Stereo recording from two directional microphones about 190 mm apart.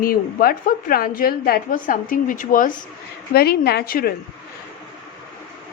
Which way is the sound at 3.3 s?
55° left (ahead or behind).